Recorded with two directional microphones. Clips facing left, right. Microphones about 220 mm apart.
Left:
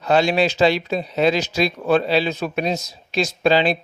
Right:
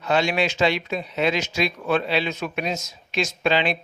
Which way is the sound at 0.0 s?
35° left (ahead or behind).